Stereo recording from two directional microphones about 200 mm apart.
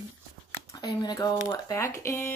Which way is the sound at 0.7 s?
20° left (ahead or behind).